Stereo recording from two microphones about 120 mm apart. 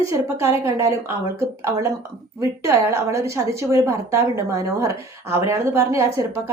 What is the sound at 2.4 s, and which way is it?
A woman's voice, 25° right (ahead or behind).